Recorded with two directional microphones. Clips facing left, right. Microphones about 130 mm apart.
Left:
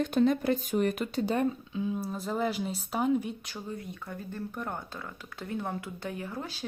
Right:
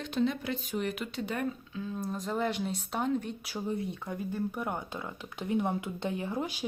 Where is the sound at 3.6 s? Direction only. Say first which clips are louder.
Right 9 dB; 20° right (ahead or behind).